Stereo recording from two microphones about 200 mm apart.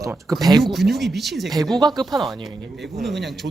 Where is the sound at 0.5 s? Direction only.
Centre (ahead or behind).